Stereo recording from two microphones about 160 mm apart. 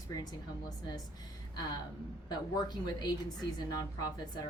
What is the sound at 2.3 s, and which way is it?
A woman's voice, 25° left (ahead or behind).